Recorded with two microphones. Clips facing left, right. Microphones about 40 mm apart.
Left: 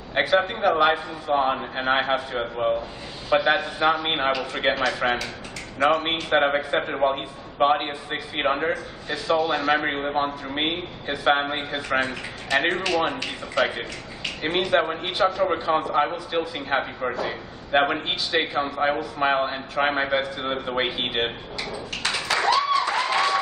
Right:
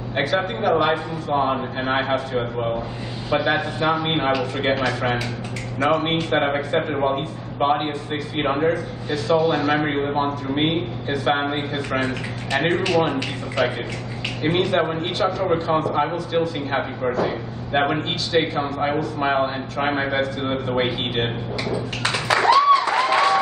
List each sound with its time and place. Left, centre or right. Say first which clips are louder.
0.1 s a man's voice: left 1 dB; centre
22.0 s music: right 4 dB; centre